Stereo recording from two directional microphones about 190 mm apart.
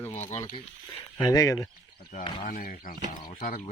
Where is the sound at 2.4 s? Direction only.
45° left (ahead or behind).